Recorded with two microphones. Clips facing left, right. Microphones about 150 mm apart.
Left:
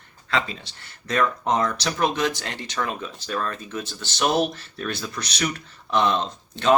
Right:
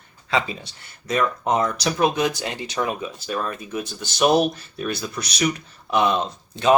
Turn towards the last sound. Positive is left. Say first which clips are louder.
# right 2 dB
turn(degrees=-10)  # may be behind; listen again after turning